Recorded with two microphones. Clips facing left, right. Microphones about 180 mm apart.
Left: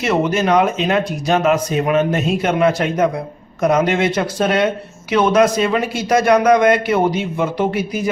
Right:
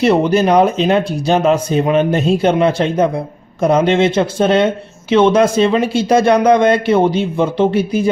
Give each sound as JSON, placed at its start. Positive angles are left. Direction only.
{"t": 0.0, "sound": "a man's voice", "side_deg": -35}